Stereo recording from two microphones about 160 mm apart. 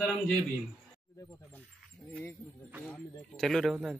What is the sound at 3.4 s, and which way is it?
Speech, centre (ahead or behind).